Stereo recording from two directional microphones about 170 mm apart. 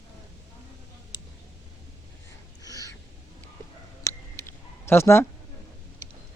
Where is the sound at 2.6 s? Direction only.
20° left (ahead or behind).